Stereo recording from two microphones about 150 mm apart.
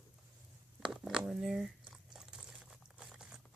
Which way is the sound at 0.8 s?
5° right (ahead or behind).